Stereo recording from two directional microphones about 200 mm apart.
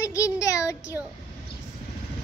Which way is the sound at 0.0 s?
15° left (ahead or behind).